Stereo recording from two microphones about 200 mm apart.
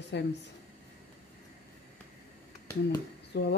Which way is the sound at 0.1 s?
60° left (ahead or behind).